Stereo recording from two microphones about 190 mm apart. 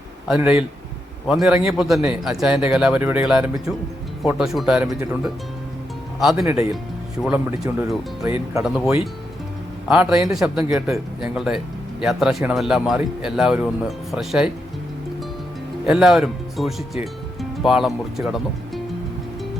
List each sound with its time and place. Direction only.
0.3 s speech: 5° right (ahead or behind)
6.3 s speech: 15° right (ahead or behind)
7.2 s speech: 5° right (ahead or behind)
15.9 s speech: centre (ahead or behind)